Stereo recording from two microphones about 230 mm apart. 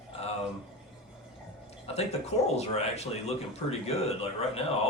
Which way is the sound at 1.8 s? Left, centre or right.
Left.